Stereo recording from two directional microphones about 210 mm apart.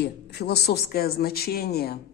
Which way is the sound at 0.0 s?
50° left (ahead or behind).